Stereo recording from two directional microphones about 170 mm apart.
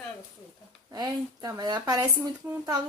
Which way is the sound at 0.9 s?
20° right (ahead or behind).